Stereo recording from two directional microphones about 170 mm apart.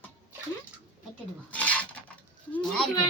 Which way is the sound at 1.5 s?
10° left (ahead or behind).